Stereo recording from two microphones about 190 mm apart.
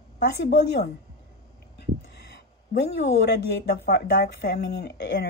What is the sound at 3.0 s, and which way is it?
A woman's voice, 60° left (ahead or behind).